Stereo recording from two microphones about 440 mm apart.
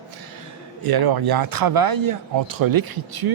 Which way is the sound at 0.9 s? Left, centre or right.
Right.